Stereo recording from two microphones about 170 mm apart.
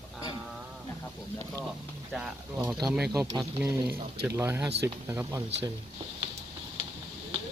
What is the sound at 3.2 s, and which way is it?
Speech, 15° right (ahead or behind).